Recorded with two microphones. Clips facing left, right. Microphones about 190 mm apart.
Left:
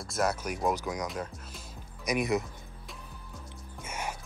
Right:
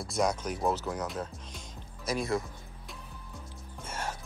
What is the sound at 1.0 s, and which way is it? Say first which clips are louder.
Speech: even; centre (ahead or behind).